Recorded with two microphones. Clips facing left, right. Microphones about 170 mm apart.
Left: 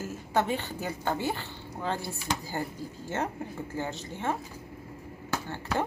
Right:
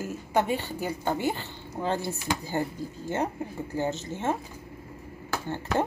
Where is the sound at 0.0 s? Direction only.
15° right (ahead or behind).